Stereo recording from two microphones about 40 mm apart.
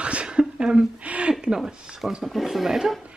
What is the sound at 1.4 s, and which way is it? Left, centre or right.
Speech, centre.